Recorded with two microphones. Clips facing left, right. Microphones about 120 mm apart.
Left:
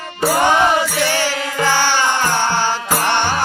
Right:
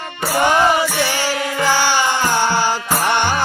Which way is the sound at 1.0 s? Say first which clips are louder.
Left 1 dB; 15° right (ahead or behind).